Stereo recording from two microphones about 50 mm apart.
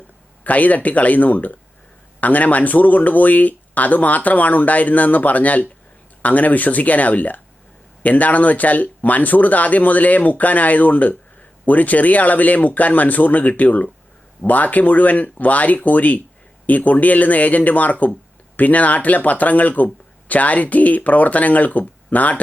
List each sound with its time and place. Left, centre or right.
0.4 s speech: left